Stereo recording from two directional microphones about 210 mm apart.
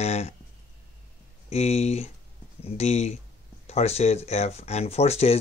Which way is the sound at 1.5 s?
30° left (ahead or behind).